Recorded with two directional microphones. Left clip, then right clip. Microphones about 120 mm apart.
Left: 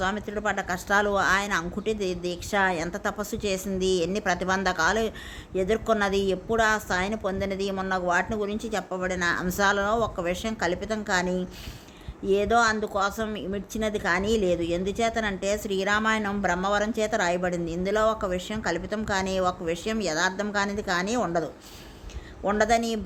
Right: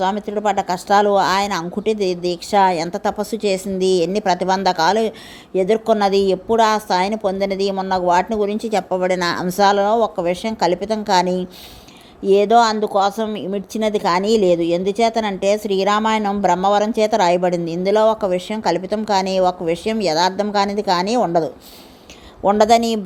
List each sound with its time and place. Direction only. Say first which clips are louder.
0.0 s a woman's voice: right 9 dB; 40° right (ahead or behind); by 9.5 s 55° right (ahead or behind)
9.5 s a woman's voice: right 11 dB; 40° right (ahead or behind)